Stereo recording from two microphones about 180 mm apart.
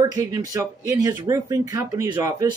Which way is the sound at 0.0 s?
20° right (ahead or behind).